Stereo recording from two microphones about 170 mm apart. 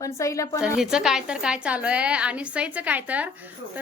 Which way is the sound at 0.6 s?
5° right (ahead or behind).